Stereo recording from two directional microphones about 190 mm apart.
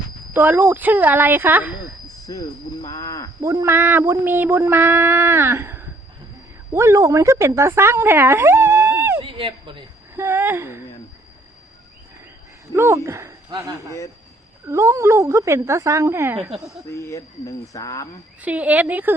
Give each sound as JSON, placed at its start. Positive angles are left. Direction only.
{"t": 0.3, "sound": "speech", "side_deg": -10}
{"t": 2.0, "sound": "speech", "side_deg": 20}
{"t": 3.4, "sound": "speech", "side_deg": -15}
{"t": 9.2, "sound": "a sound", "side_deg": -25}
{"t": 10.2, "sound": "a sound", "side_deg": -15}
{"t": 12.7, "sound": "speech", "side_deg": -15}
{"t": 16.9, "sound": "speech", "side_deg": 15}
{"t": 18.4, "sound": "speech", "side_deg": -10}